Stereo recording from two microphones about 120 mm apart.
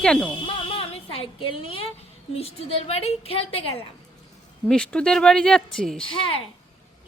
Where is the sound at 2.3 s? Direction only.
55° left (ahead or behind).